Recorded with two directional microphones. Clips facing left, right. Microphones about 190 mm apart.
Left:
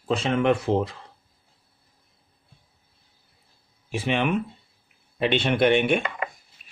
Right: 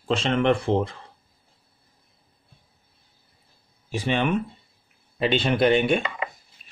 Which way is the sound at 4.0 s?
5° left (ahead or behind).